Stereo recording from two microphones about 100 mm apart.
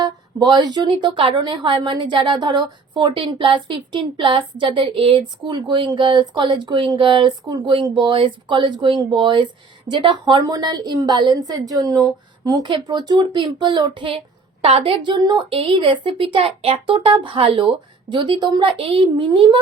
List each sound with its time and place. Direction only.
0.0 s a woman's voice: 45° right (ahead or behind); by 5.3 s 65° right (ahead or behind)
5.5 s speech: 50° right (ahead or behind)
14.6 s a woman's voice: 65° right (ahead or behind); by 18.6 s 45° right (ahead or behind)
18.6 s a woman's voice: 70° right (ahead or behind); by 19.5 s 55° right (ahead or behind)